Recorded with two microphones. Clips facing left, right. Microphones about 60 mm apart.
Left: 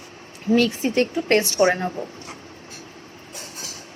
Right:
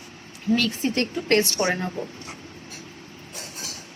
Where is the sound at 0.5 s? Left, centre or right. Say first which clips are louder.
Left 6 dB; left.